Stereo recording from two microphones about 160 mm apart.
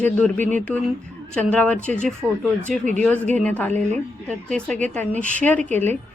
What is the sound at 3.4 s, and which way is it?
Speech, 10° left (ahead or behind).